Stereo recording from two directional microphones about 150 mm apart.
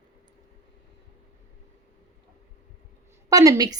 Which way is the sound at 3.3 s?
25° right (ahead or behind).